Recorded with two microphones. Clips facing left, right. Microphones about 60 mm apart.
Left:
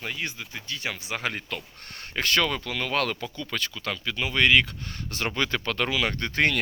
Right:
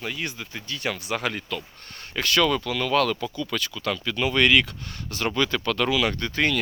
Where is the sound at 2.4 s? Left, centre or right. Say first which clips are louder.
Right 5 dB; centre.